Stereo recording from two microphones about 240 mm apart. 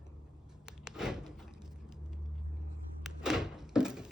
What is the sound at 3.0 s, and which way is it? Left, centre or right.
Thunk, centre.